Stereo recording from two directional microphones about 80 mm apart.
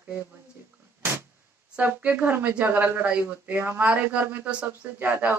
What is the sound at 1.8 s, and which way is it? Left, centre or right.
Speech, right.